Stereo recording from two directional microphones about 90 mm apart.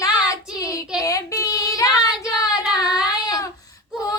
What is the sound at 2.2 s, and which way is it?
Child singing, 10° right (ahead or behind).